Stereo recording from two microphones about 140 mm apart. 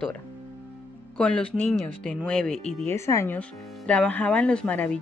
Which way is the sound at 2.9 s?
15° left (ahead or behind).